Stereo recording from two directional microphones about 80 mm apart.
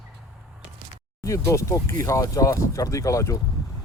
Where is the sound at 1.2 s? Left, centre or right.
Left.